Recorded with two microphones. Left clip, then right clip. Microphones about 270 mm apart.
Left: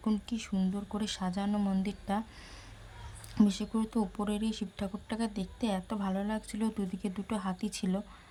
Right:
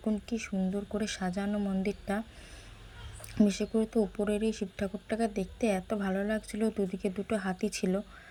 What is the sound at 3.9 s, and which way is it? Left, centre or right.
A woman's voice, centre.